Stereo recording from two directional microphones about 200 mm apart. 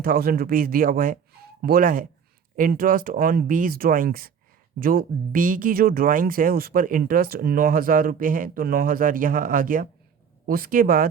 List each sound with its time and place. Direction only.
0.0 s speech: 45° right (ahead or behind)